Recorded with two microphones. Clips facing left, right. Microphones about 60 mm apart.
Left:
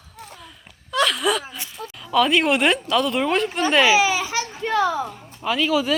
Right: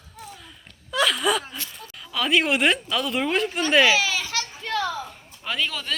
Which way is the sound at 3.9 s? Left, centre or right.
Centre.